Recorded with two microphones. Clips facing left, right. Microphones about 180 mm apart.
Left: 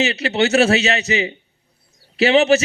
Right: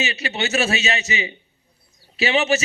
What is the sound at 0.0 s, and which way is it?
Speech, 65° left (ahead or behind).